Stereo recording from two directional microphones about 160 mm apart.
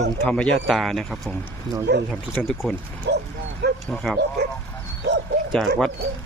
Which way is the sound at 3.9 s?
5° left (ahead or behind).